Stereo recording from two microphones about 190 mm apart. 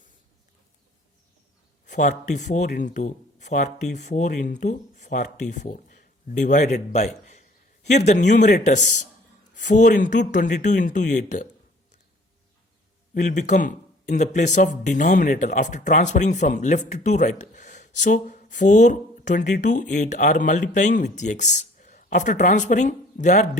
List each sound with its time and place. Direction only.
1.9 s speech: 40° left (ahead or behind)
13.1 s speech: 40° left (ahead or behind)